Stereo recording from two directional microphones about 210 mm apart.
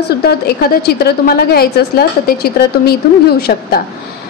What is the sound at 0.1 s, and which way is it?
A woman's voice, 50° left (ahead or behind).